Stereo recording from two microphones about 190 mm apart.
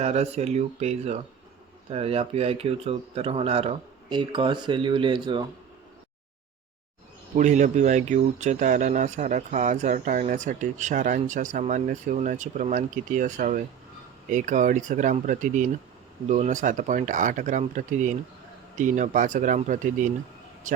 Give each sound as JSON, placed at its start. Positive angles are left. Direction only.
{"t": 0.0, "sound": "a man's voice", "side_deg": -35}
{"t": 7.3, "sound": "speech", "side_deg": -40}